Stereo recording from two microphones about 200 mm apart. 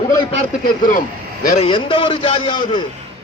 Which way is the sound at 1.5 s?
30° left (ahead or behind).